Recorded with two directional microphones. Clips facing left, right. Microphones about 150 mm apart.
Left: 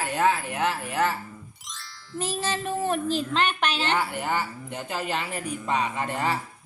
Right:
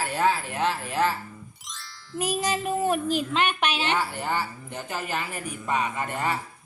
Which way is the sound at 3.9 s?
15° left (ahead or behind).